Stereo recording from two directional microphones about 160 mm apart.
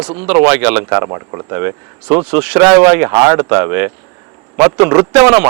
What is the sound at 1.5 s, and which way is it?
A man's voice, 15° right (ahead or behind).